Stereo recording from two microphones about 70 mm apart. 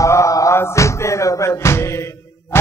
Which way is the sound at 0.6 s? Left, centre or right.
Left.